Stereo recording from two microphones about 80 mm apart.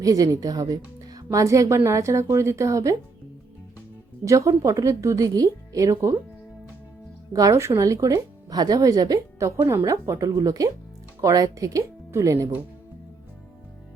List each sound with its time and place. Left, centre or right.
0.0 s speech: right
4.3 s speech: right
7.3 s speech: right
9.6 s a woman's voice: right